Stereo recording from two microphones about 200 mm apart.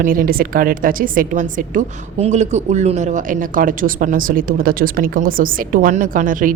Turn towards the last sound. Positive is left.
turn(degrees=-40)  # may be behind; listen again after turning